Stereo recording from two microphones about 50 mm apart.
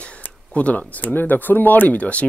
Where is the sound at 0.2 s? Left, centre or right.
Left.